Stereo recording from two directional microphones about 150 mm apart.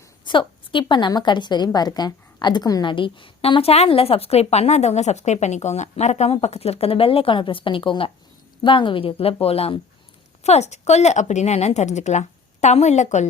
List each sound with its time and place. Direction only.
0.3 s a woman's voice: 35° left (ahead or behind); by 13.2 s 50° left (ahead or behind)